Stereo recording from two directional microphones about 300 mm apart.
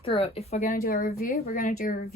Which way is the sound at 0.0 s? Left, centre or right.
Centre.